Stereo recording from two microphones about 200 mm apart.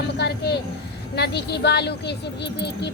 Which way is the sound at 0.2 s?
55° left (ahead or behind).